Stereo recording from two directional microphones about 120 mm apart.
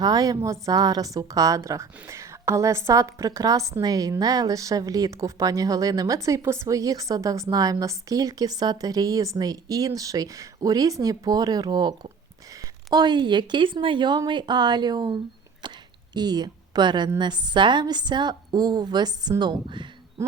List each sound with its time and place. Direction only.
0.0 s a woman's voice: 30° right (ahead or behind)
15.6 s a sound: 40° right (ahead or behind)
16.1 s a woman's voice: 35° right (ahead or behind)